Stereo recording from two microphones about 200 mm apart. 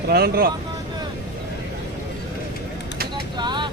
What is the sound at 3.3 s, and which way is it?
Vehicle, 20° right (ahead or behind).